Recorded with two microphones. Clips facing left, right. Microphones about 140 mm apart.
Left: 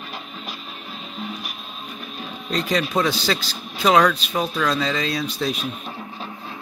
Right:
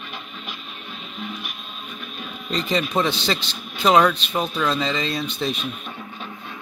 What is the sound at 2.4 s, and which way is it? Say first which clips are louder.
Speech: left 1 dB; centre (ahead or behind).